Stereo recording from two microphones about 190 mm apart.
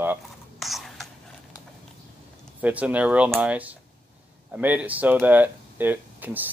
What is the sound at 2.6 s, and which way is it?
Speech, 10° right (ahead or behind).